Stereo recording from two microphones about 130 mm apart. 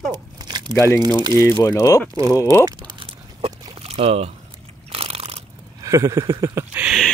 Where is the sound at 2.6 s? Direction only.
40° right (ahead or behind).